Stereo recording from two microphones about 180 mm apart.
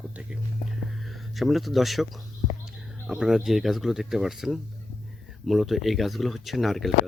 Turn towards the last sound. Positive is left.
turn(degrees=0)  # may be behind; listen again after turning